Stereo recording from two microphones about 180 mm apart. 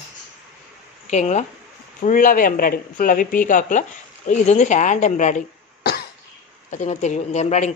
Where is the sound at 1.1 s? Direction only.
40° left (ahead or behind).